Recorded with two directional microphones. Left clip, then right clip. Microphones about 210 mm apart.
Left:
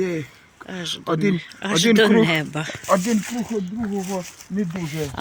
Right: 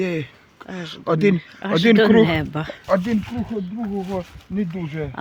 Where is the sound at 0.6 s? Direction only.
5° right (ahead or behind).